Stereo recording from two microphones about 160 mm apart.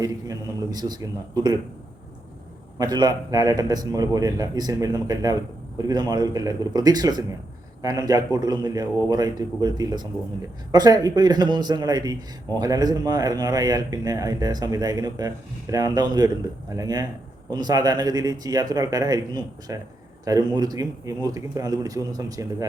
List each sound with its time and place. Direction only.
0.0 s a man's voice: 25° right (ahead or behind)
2.7 s a man's voice: 25° right (ahead or behind)